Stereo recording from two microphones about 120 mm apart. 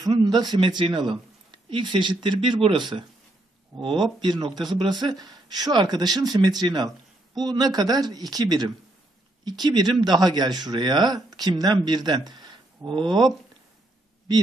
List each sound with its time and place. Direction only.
0.0 s speech: 35° right (ahead or behind)